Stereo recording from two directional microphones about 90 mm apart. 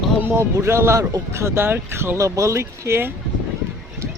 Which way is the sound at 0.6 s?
30° right (ahead or behind).